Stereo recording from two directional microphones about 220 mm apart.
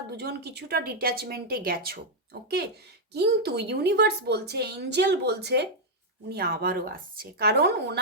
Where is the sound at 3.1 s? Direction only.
50° right (ahead or behind).